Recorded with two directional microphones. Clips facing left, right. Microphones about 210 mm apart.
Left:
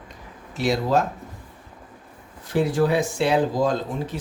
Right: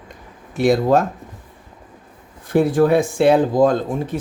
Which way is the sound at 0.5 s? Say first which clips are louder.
Right 7 dB; 55° right (ahead or behind).